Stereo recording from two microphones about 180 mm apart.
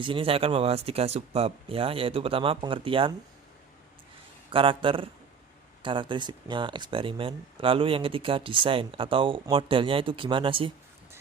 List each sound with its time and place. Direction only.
0.0 s speech: 30° right (ahead or behind)
4.5 s speech: 30° right (ahead or behind)